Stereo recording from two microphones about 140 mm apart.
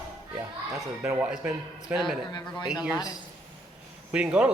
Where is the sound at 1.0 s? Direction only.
10° right (ahead or behind).